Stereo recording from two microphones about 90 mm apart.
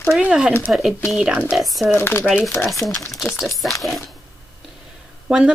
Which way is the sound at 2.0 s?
25° left (ahead or behind).